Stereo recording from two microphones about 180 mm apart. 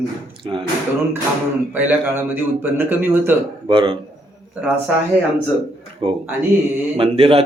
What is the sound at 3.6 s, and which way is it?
Speech, 30° right (ahead or behind).